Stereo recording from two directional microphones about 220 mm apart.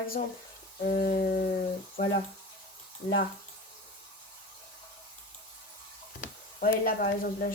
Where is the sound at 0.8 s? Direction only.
40° left (ahead or behind).